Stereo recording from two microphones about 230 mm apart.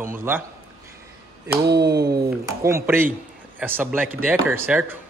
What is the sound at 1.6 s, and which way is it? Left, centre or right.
Speech, right.